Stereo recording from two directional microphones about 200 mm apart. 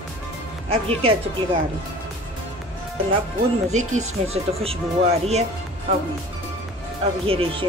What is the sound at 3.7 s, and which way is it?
Speech, 35° right (ahead or behind).